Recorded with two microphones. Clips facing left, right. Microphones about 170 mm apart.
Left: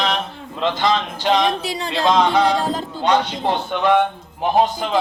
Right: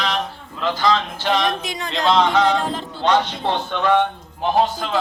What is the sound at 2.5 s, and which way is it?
Speech, 35° left (ahead or behind).